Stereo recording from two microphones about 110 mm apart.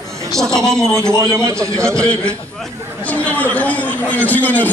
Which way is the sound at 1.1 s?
25° right (ahead or behind).